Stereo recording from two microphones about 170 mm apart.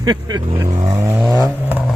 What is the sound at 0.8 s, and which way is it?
Vehicle, 15° right (ahead or behind).